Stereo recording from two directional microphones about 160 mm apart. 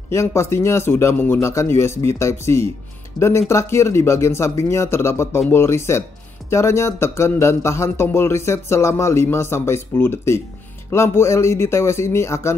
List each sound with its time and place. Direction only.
0.1 s speech: 15° left (ahead or behind)